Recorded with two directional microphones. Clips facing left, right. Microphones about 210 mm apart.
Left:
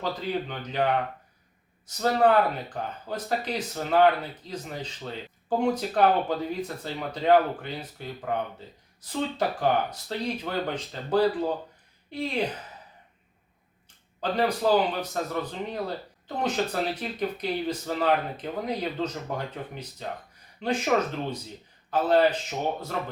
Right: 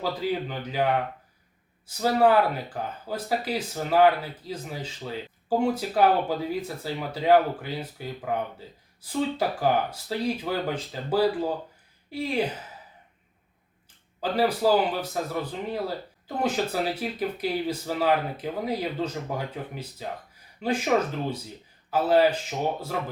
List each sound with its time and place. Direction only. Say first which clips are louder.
0.0 s speech: right 2 dB; 5° right (ahead or behind)
2.0 s speech: right 1 dB; 5° right (ahead or behind)
9.6 s speech: right 1 dB; 5° right (ahead or behind)
14.2 s speech: right 2 dB; 5° right (ahead or behind)